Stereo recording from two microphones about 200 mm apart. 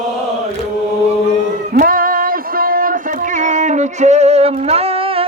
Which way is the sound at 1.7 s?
45° right (ahead or behind).